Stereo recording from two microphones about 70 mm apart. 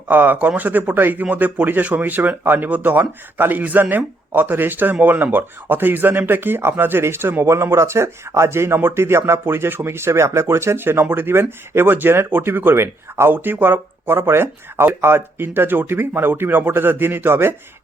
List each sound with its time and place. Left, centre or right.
0.1 s a man's voice: right